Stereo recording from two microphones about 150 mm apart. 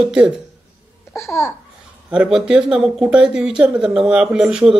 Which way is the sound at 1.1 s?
20° left (ahead or behind).